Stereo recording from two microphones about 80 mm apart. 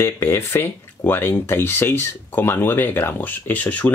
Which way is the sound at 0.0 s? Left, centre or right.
Left.